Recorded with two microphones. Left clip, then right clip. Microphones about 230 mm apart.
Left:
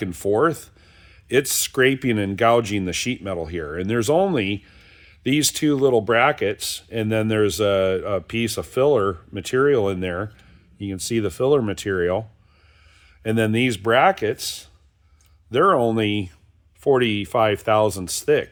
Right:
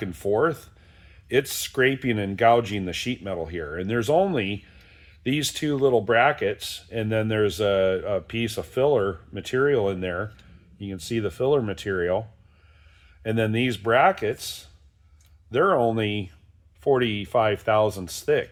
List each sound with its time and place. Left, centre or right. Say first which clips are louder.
0.0 s speech: left 3 dB; left
13.2 s speech: left 4 dB; left